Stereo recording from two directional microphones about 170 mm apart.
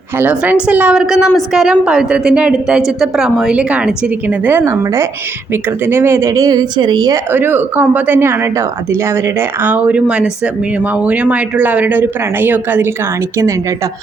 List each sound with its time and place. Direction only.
0.2 s a woman's voice: 10° right (ahead or behind); by 7.2 s 25° right (ahead or behind)
7.3 s speech: 10° right (ahead or behind)